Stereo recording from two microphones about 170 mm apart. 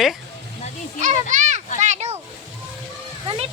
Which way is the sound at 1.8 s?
40° right (ahead or behind).